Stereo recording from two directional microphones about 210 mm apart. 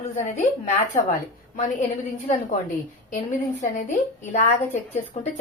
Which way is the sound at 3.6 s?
35° left (ahead or behind).